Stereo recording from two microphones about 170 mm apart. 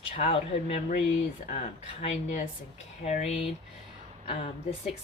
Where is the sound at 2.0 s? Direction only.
40° left (ahead or behind).